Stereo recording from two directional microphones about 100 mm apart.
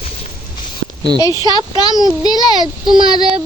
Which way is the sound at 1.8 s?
40° left (ahead or behind).